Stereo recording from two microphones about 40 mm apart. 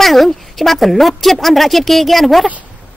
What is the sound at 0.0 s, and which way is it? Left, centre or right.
Speech, centre.